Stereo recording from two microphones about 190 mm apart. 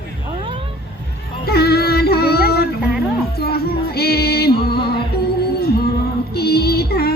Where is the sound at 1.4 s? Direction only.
55° left (ahead or behind).